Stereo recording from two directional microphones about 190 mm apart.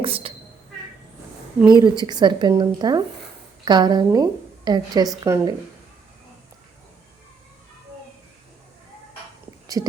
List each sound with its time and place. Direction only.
0.0 s a woman's voice: 30° right (ahead or behind)
1.8 s a woman's voice: 20° right (ahead or behind)
9.7 s a woman's voice: 20° right (ahead or behind)